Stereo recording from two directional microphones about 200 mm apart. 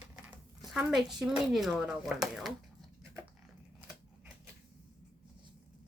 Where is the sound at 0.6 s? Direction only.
Centre (ahead or behind).